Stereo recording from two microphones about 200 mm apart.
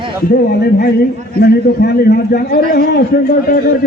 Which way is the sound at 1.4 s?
50° left (ahead or behind).